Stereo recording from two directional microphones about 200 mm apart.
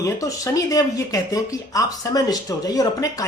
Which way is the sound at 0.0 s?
15° left (ahead or behind).